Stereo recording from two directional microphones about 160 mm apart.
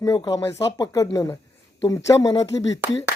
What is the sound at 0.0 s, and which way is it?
Speech, 25° left (ahead or behind).